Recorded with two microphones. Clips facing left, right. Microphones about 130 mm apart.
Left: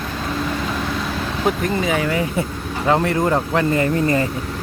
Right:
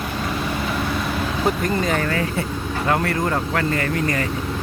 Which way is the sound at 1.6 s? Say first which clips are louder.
Left 1 dB; 5° left (ahead or behind).